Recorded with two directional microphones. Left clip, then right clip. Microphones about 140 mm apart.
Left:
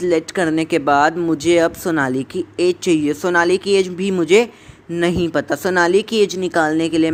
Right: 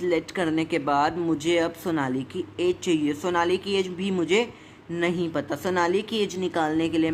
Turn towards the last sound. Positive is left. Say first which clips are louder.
# left 8 dB
turn(degrees=45)  # may be behind; listen again after turning